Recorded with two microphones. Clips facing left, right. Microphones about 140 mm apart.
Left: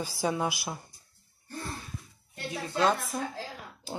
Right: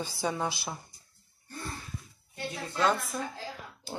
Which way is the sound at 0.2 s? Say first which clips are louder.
Left 2 dB; 10° left (ahead or behind).